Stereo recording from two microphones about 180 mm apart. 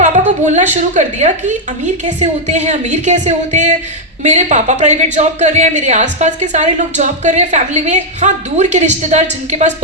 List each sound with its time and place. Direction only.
0.0 s a woman's voice: 45° right (ahead or behind)